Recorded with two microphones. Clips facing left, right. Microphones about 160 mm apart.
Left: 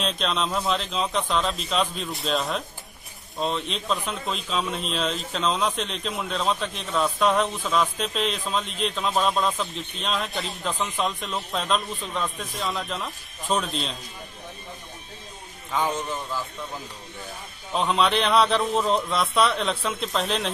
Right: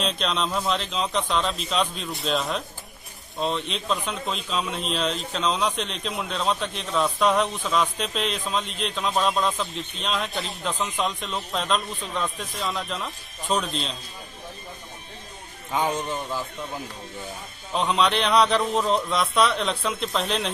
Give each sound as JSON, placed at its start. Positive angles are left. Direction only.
{"t": 0.0, "sound": "a man's voice", "side_deg": 0}
{"t": 15.7, "sound": "a man's voice", "side_deg": -20}
{"t": 17.7, "sound": "a man's voice", "side_deg": 0}